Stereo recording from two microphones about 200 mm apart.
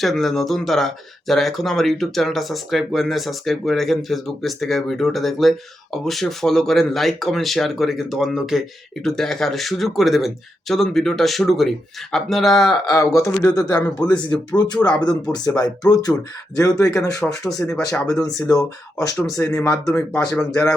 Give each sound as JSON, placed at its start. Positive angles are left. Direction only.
{"t": 0.0, "sound": "speech", "side_deg": 0}
{"t": 12.8, "sound": "speech", "side_deg": 15}